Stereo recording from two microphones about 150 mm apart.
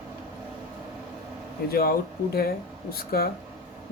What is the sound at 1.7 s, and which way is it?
Speech, 90° left.